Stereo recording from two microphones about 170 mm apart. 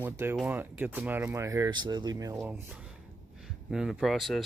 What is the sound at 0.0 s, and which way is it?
Speech, 15° right (ahead or behind).